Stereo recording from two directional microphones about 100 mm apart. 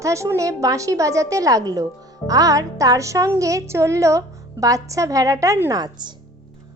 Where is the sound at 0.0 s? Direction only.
30° right (ahead or behind).